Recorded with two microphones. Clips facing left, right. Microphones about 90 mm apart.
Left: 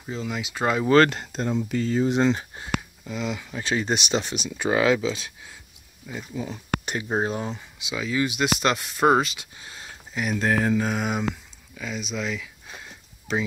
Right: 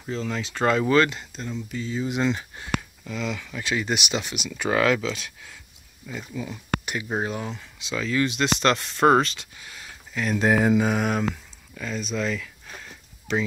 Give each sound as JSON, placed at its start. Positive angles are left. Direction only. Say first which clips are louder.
{"t": 0.0, "sound": "speech", "louder": "right 1 dB", "side_deg": 10}
{"t": 0.8, "sound": "speech", "louder": "left 3 dB", "side_deg": 45}
{"t": 2.0, "sound": "speech", "louder": "left 3 dB", "side_deg": 35}
{"t": 7.8, "sound": "speech", "louder": "right 1 dB", "side_deg": 10}
{"t": 9.6, "sound": "a sound", "louder": "left 1 dB", "side_deg": 25}
{"t": 10.4, "sound": "mantra", "louder": "right 3 dB", "side_deg": -15}
{"t": 10.9, "sound": "mantra", "louder": "right 2 dB", "side_deg": 0}
{"t": 11.7, "sound": "speech", "louder": "right 2 dB", "side_deg": 5}
{"t": 12.8, "sound": "a sound", "louder": "even", "side_deg": 15}